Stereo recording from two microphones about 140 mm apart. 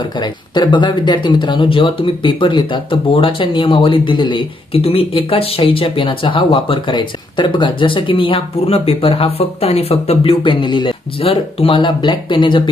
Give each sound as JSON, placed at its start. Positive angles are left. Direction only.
{"t": 0.1, "sound": "speech", "side_deg": 30}